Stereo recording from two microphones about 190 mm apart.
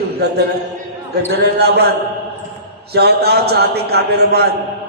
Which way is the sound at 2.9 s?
55° right (ahead or behind).